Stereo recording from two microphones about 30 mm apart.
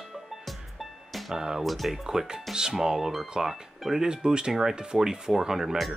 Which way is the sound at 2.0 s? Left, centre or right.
Right.